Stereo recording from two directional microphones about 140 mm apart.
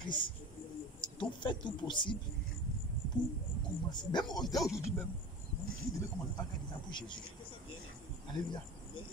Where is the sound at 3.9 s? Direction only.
30° left (ahead or behind).